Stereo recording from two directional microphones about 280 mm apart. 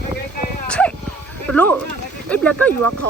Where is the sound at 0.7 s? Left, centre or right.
Centre.